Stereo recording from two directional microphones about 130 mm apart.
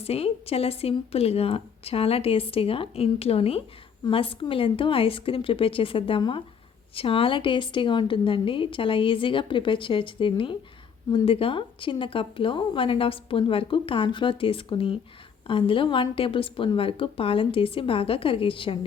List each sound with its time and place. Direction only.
0.0 s a woman's voice: 50° left (ahead or behind)